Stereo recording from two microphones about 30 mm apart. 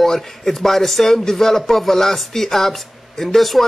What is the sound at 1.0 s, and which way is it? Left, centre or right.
Speech, centre.